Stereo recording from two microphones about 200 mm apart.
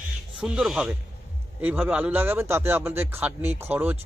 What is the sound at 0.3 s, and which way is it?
Speech, 5° right (ahead or behind).